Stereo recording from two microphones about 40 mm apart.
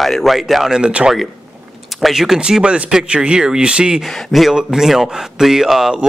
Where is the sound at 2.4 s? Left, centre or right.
Right.